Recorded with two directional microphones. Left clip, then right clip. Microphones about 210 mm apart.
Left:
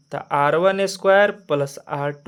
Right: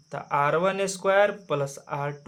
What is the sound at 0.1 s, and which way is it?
Speech, 35° left (ahead or behind).